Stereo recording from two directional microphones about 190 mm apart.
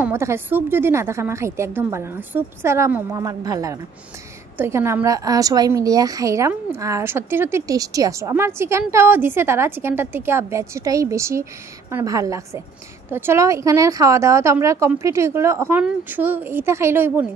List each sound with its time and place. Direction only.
0.0 s a woman's voice: 15° right (ahead or behind)